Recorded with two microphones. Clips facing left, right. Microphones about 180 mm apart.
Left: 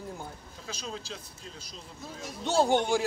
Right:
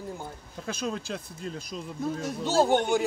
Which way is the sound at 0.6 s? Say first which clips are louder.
Right 7 dB; 55° right (ahead or behind).